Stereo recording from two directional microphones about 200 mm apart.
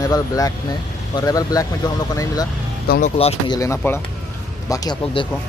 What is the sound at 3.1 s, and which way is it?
Speech, 30° left (ahead or behind).